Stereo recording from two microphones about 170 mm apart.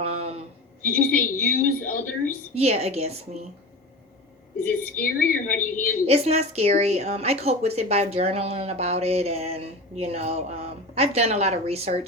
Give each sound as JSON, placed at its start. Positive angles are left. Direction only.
{"t": 0.0, "sound": "a sound", "side_deg": -35}
{"t": 0.9, "sound": "a woman's voice", "side_deg": 55}
{"t": 2.6, "sound": "speech", "side_deg": -40}
{"t": 4.8, "sound": "a woman's voice", "side_deg": 55}
{"t": 6.1, "sound": "speech", "side_deg": -40}